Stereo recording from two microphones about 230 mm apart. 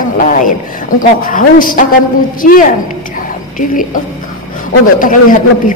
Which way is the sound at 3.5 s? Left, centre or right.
Left.